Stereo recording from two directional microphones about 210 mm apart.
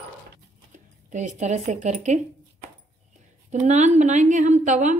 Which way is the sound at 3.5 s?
35° right (ahead or behind).